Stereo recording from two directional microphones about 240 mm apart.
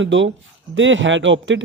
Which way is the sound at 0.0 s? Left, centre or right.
Right.